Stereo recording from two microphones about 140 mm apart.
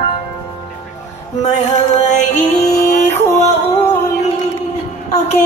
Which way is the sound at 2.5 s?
55° left (ahead or behind).